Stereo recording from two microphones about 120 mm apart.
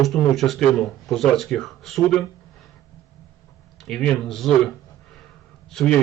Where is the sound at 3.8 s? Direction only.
5° left (ahead or behind).